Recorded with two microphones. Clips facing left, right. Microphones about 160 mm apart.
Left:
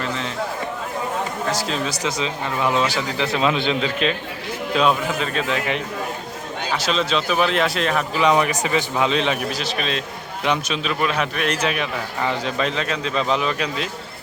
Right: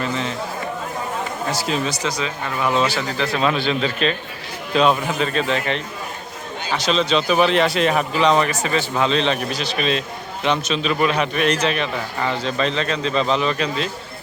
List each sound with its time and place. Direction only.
0.0 s speech: centre (ahead or behind)
1.5 s speech: 5° right (ahead or behind)
2.0 s a man's voice: 25° left (ahead or behind)
4.7 s speech: 5° left (ahead or behind)
8.2 s a man's voice: 10° left (ahead or behind)